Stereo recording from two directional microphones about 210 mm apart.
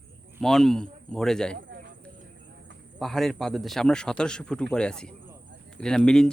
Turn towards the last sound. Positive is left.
turn(degrees=5)  # may be behind; listen again after turning